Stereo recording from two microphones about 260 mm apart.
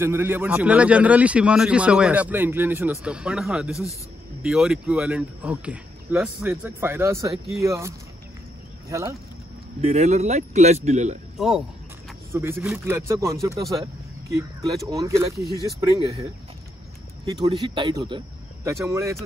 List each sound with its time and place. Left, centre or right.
0.0 s a man's voice: centre
9.8 s speech: right
11.3 s speech: centre
14.9 s speech: centre
17.4 s speech: centre